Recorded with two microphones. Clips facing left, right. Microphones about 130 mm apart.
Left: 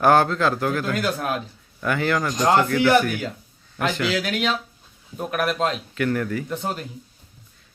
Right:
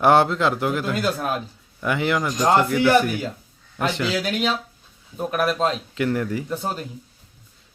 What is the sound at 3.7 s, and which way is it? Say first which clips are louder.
Speech: even; 25° right (ahead or behind).